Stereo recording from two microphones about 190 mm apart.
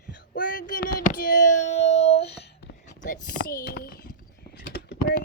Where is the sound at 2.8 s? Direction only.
40° left (ahead or behind).